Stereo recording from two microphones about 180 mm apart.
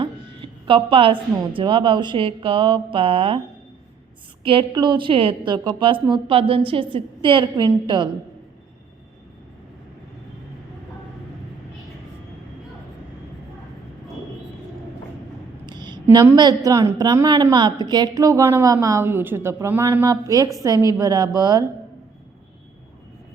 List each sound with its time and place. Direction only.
0.0 s a woman's voice: 30° right (ahead or behind)
4.4 s a woman's voice: 30° right (ahead or behind)
15.6 s a sound: 25° right (ahead or behind)
16.1 s a woman's voice: 20° right (ahead or behind)